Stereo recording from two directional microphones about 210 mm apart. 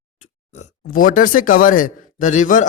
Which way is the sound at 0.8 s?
40° left (ahead or behind).